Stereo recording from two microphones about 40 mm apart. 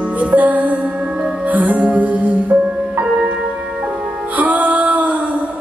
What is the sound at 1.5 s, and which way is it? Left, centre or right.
Music, right.